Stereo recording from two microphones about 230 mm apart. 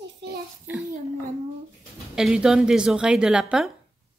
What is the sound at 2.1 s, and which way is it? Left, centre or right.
Speech, centre.